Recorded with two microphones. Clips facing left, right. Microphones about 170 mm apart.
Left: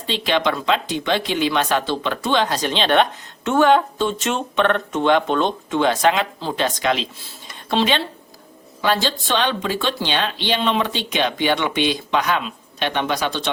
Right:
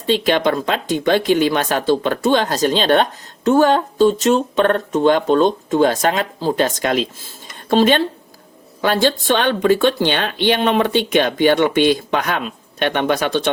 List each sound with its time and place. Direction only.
0.1 s speech: 45° right (ahead or behind)